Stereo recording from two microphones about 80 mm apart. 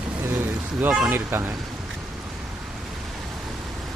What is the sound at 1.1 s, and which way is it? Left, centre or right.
Speech, right.